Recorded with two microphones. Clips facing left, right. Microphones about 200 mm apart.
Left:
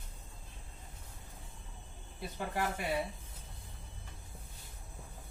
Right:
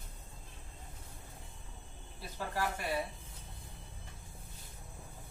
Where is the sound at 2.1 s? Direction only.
20° left (ahead or behind).